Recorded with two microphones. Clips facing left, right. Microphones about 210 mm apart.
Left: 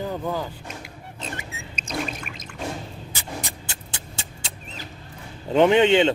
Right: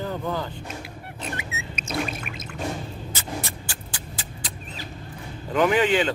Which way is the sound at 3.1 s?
15° left (ahead or behind).